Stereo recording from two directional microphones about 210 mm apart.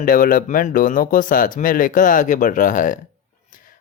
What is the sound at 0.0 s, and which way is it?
Speech, 40° left (ahead or behind).